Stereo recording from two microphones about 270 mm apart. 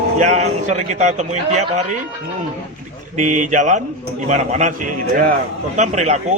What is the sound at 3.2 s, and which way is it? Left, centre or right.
A man's voice, right.